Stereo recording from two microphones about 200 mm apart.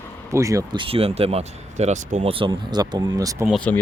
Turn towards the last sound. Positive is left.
turn(degrees=5)  # may be behind; listen again after turning